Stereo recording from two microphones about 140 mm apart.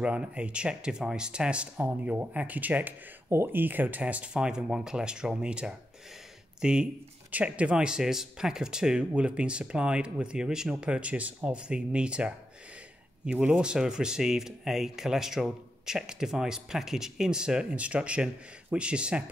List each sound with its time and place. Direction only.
0.0 s speech: 10° right (ahead or behind)